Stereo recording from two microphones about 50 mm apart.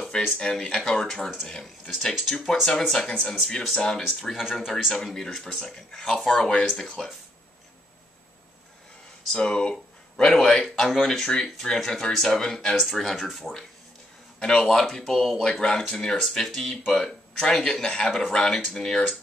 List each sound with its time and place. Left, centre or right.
0.4 s speech: centre
3.3 s speech: centre
4.3 s speech: centre
4.9 s speech: centre
9.3 s speech: centre
14.7 s speech: centre